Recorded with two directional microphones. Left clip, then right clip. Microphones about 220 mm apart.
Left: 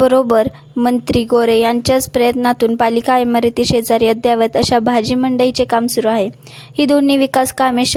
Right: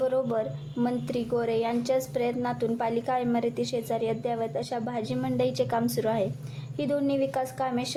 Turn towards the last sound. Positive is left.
turn(degrees=40)  # may be behind; listen again after turning